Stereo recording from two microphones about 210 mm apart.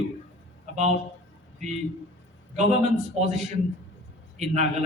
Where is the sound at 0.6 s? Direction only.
35° right (ahead or behind).